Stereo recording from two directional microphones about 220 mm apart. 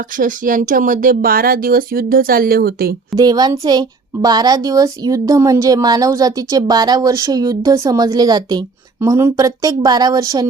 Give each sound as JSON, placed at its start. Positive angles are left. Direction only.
{"t": 0.2, "sound": "speech", "side_deg": -40}
{"t": 3.2, "sound": "a child's voice", "side_deg": -20}